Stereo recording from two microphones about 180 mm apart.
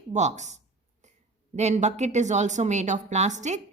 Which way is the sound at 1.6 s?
40° right (ahead or behind).